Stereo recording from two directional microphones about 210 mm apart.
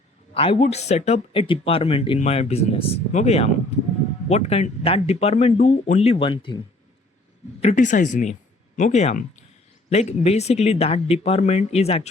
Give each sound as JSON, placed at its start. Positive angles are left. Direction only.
{"t": 0.3, "sound": "speech", "side_deg": 25}
{"t": 7.6, "sound": "speech", "side_deg": 35}